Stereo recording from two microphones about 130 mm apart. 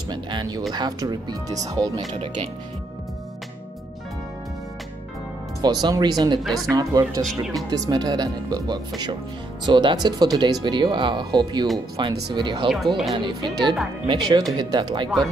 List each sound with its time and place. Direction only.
0.1 s speech: 35° right (ahead or behind)
5.6 s speech: 35° right (ahead or behind)
6.4 s speech: centre (ahead or behind)
6.7 s speech: 30° right (ahead or behind)
12.7 s speech: centre (ahead or behind)
13.1 s speech: 35° right (ahead or behind)